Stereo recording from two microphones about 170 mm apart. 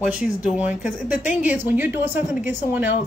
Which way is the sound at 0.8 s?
50° left (ahead or behind).